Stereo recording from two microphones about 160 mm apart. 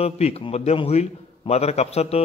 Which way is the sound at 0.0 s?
40° left (ahead or behind).